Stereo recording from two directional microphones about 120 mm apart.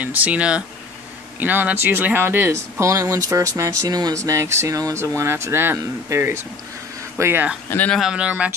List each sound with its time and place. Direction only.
0.0 s speech: 15° right (ahead or behind)
7.7 s speech: 10° left (ahead or behind)
8.0 s speech: 5° right (ahead or behind)